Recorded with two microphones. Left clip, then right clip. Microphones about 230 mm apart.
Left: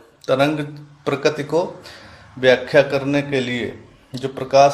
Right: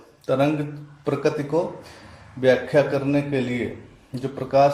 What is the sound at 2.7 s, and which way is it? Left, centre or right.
Speech, left.